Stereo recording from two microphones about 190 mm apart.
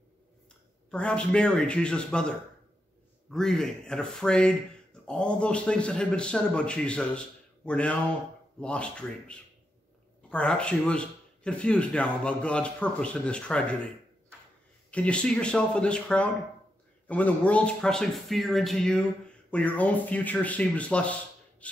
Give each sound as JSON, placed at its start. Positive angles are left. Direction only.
{"t": 0.8, "sound": "a man's voice", "side_deg": 5}
{"t": 14.9, "sound": "a man's voice", "side_deg": 5}